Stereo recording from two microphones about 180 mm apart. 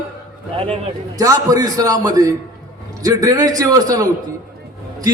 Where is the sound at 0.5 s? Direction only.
30° right (ahead or behind).